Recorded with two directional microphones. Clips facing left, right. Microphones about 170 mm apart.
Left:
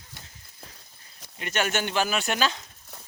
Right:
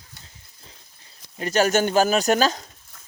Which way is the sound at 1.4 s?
35° right (ahead or behind).